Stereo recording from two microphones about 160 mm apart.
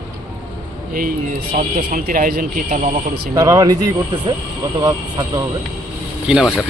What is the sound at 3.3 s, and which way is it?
Speech, 20° right (ahead or behind).